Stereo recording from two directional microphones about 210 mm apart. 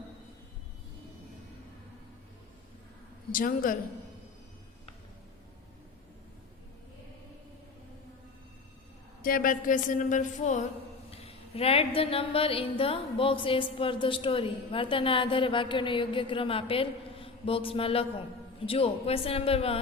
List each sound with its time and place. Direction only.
3.3 s a woman's voice: 40° left (ahead or behind)
9.2 s a woman's voice: 40° left (ahead or behind)
11.1 s a sound: 30° left (ahead or behind)